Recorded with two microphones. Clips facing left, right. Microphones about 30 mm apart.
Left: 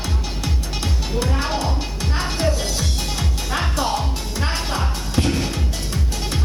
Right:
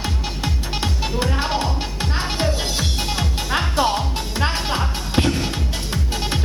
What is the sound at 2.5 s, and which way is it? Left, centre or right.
Music, right.